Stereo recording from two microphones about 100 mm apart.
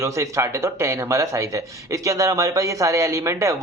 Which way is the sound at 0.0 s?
30° right (ahead or behind).